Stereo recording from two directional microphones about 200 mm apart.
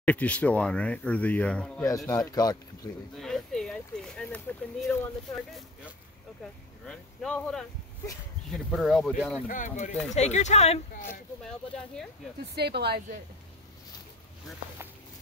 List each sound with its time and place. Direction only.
0.0 s speech: 5° left (ahead or behind)
2.0 s speech: 20° left (ahead or behind)
3.2 s speech: centre (ahead or behind)
9.5 s speech: 40° left (ahead or behind)
12.5 s a woman's voice: 55° right (ahead or behind)